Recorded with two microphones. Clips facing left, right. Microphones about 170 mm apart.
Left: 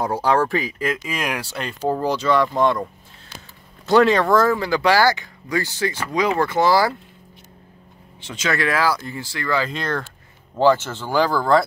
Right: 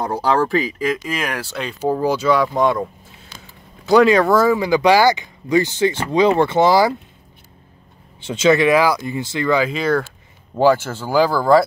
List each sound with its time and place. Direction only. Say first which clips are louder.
0.0 s speech: right 1 dB; 5° left (ahead or behind)
1.8 s speech: right 3 dB; 5° right (ahead or behind)
8.2 s speech: right 9 dB; 25° right (ahead or behind)
9.7 s speech: right 7 dB; 5° right (ahead or behind)